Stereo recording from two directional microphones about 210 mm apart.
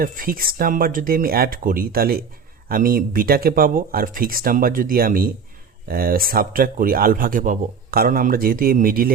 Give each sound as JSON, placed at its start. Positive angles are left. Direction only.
{"t": 0.0, "sound": "speech", "side_deg": -45}